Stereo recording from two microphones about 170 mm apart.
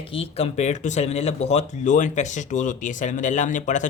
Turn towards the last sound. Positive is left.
turn(degrees=45)  # may be behind; listen again after turning